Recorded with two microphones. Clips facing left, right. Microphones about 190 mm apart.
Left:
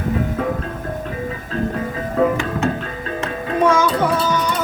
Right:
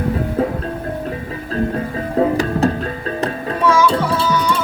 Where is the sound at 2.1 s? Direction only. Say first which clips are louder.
Right 2 dB; 35° right (ahead or behind).